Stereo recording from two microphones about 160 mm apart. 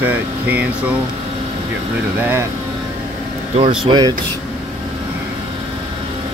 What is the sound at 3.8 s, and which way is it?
Speech, 30° right (ahead or behind).